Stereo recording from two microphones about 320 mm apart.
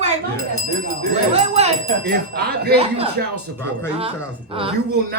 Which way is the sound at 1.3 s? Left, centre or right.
Centre.